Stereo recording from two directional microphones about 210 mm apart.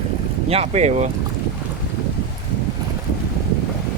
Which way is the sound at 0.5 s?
30° right (ahead or behind).